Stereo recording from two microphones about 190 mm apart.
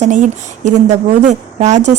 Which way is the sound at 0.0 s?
40° right (ahead or behind).